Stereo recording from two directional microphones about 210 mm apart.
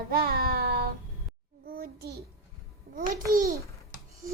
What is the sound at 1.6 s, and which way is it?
Child singing, 45° right (ahead or behind).